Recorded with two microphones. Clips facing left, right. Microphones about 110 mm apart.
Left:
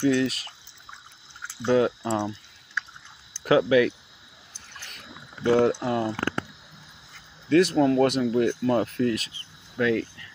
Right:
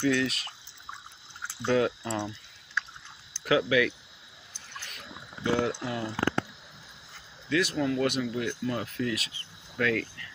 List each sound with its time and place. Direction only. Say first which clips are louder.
0.0 s cricket: left 4 dB; 25° left (ahead or behind)
1.7 s cricket: left 4 dB; 25° left (ahead or behind)
3.4 s speech: left 5 dB; 35° left (ahead or behind)
5.4 s speech: left 7 dB; 40° left (ahead or behind)
7.4 s speech: left 8 dB; 40° left (ahead or behind)
9.4 s cricket: left 4 dB; 20° left (ahead or behind)